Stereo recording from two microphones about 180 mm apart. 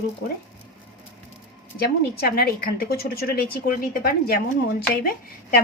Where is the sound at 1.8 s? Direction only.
60° left (ahead or behind).